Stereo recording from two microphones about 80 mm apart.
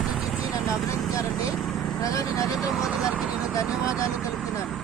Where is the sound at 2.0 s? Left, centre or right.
Left.